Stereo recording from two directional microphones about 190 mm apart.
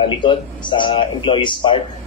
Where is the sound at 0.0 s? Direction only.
25° left (ahead or behind).